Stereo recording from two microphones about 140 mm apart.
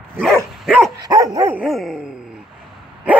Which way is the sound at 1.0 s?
25° right (ahead or behind).